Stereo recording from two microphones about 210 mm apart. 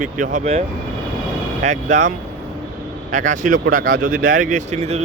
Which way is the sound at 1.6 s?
35° right (ahead or behind).